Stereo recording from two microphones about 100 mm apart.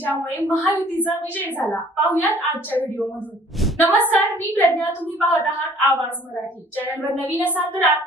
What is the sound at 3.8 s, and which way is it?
Speech, 15° left (ahead or behind).